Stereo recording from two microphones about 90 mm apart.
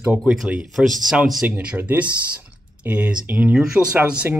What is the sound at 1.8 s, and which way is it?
Speech, 15° right (ahead or behind).